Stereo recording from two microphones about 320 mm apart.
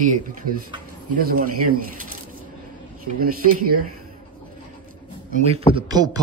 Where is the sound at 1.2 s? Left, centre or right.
Right.